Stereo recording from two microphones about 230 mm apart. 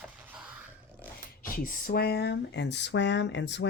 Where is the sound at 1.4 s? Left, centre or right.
Left.